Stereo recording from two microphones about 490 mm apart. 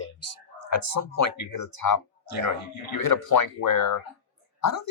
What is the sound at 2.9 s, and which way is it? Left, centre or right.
Speech, left.